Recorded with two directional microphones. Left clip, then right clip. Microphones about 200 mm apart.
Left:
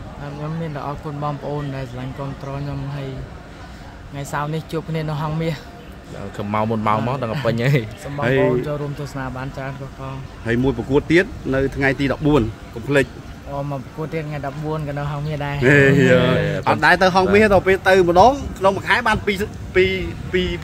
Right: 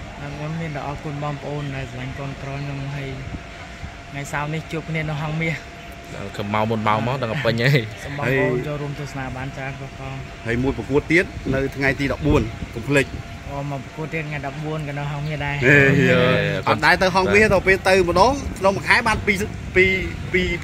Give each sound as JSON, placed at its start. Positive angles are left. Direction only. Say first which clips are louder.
{"t": 0.7, "sound": "speech", "louder": "even", "side_deg": 5}
{"t": 4.2, "sound": "speech", "louder": "left 2 dB", "side_deg": 10}
{"t": 6.3, "sound": "speech", "louder": "left 1 dB", "side_deg": 0}
{"t": 8.2, "sound": "speech", "louder": "left 3 dB", "side_deg": 45}
{"t": 10.4, "sound": "speech", "louder": "left 3 dB", "side_deg": 45}
{"t": 13.7, "sound": "speech", "louder": "left 2 dB", "side_deg": 10}
{"t": 15.6, "sound": "speech", "louder": "left 1 dB", "side_deg": 45}
{"t": 16.3, "sound": "speech", "louder": "even", "side_deg": 0}
{"t": 16.6, "sound": "speech", "louder": "left 3 dB", "side_deg": 45}